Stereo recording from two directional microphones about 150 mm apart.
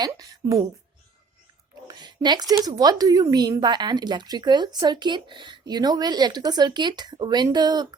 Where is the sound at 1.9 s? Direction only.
30° right (ahead or behind).